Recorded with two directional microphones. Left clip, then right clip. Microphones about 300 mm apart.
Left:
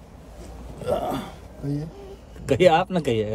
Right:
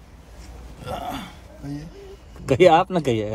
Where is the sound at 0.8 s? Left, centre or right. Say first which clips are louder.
Left 5 dB; centre.